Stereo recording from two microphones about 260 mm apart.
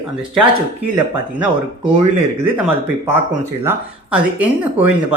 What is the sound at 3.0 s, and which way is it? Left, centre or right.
Speech, centre.